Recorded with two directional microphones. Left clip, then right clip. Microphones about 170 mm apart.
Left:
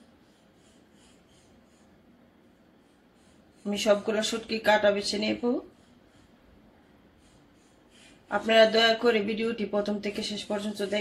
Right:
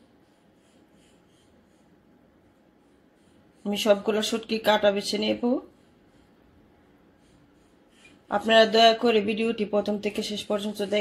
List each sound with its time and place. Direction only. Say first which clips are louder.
3.7 s speech: right 2 dB; 30° right (ahead or behind)
8.3 s speech: right 1 dB; 30° right (ahead or behind)